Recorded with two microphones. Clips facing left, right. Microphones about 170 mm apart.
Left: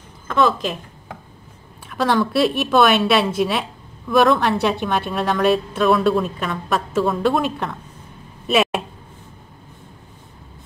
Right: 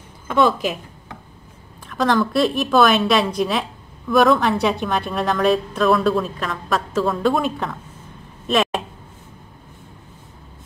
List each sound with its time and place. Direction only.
0.5 s a woman's voice: 5° right (ahead or behind)
1.9 s a woman's voice: 5° left (ahead or behind)
8.5 s a sound: 5° left (ahead or behind)